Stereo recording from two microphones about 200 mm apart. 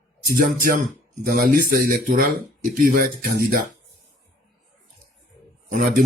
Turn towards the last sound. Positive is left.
turn(degrees=-40)  # may be behind; listen again after turning